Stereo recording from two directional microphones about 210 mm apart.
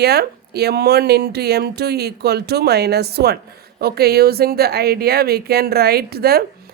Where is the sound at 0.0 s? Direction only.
50° right (ahead or behind).